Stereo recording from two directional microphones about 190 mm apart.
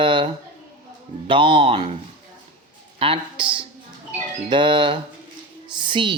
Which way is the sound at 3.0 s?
25° right (ahead or behind).